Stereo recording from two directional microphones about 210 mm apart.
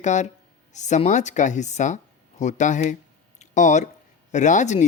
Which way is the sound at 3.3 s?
35° left (ahead or behind).